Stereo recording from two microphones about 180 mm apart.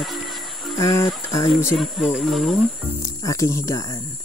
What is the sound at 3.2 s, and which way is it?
Speech, 20° left (ahead or behind).